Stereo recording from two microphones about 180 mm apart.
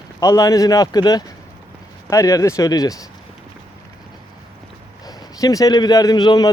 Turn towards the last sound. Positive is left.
turn(degrees=25)  # may be behind; listen again after turning